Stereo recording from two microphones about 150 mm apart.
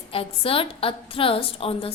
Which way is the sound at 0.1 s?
40° left (ahead or behind).